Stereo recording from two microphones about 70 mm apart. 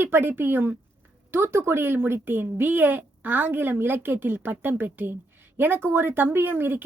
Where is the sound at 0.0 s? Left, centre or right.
Right.